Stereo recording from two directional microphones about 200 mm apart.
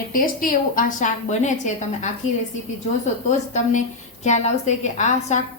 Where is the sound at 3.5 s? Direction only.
35° left (ahead or behind).